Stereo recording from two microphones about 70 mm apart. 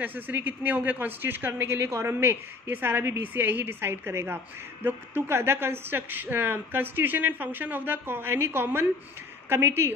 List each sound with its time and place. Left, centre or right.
0.0 s speech: right